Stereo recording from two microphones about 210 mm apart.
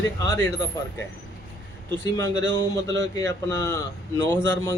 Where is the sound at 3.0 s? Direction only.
15° left (ahead or behind).